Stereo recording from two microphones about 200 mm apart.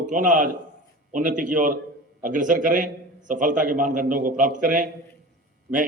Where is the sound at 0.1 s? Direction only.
40° right (ahead or behind).